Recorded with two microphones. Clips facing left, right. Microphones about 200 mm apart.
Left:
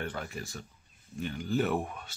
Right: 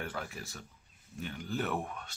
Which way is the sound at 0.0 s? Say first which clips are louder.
Left 3 dB; 5° right (ahead or behind).